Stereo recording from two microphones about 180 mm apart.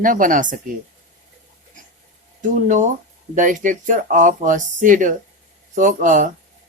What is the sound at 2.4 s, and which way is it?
Speech, 45° right (ahead or behind).